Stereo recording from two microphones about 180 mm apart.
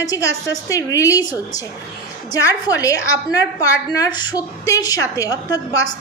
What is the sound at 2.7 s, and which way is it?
A woman's voice, 20° left (ahead or behind).